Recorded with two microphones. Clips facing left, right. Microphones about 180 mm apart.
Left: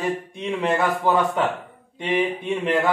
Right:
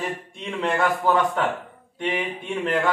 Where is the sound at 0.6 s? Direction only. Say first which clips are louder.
Even; 10° left (ahead or behind).